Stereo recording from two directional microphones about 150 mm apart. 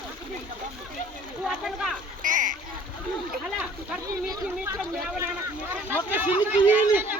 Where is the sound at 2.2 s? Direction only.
60° right (ahead or behind).